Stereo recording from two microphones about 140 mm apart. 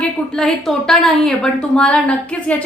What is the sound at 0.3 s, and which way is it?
A woman's voice, 5° left (ahead or behind).